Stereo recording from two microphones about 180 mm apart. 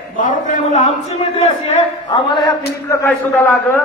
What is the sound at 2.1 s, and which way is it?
A man's voice, 25° left (ahead or behind).